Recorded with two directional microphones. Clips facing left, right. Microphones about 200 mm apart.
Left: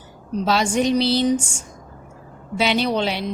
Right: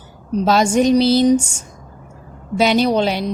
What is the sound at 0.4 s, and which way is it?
A woman's voice, 45° right (ahead or behind).